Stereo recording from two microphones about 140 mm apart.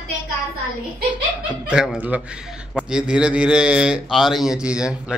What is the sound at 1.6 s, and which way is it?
Speech, 5° right (ahead or behind).